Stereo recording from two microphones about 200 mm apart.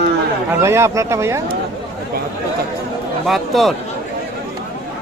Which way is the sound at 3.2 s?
Centre (ahead or behind).